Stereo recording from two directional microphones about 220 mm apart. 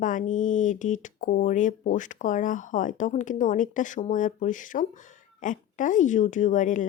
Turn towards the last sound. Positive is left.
turn(degrees=35)  # may be behind; listen again after turning